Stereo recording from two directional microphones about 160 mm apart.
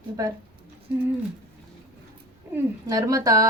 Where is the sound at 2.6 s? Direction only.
20° right (ahead or behind).